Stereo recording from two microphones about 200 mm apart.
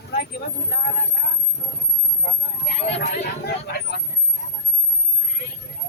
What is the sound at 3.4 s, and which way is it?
Speech, 55° left (ahead or behind).